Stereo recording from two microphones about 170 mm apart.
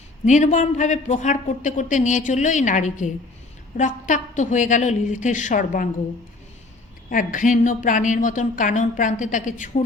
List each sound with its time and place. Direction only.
0.3 s speech: 45° left (ahead or behind)
7.1 s speech: 50° left (ahead or behind)